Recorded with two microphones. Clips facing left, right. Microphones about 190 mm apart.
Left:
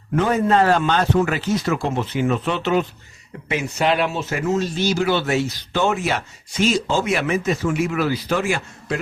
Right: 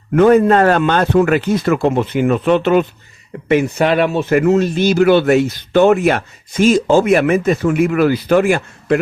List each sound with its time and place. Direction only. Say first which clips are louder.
0.2 s speech: right 8 dB; 60° right (ahead or behind)